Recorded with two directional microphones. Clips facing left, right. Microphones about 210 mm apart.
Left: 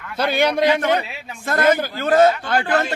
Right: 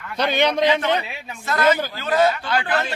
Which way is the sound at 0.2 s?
10° left (ahead or behind).